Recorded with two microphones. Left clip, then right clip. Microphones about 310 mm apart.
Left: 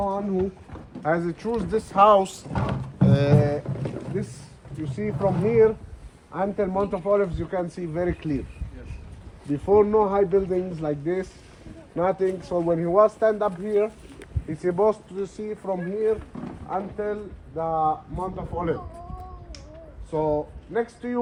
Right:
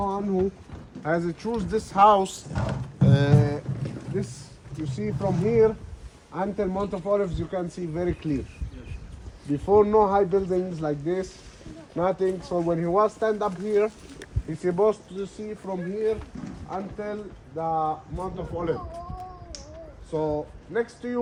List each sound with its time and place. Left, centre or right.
0.0 s a sound: centre
1.0 s speech: centre
2.5 s speech: centre
3.1 s speech: centre
9.5 s speech: centre
20.1 s speech: centre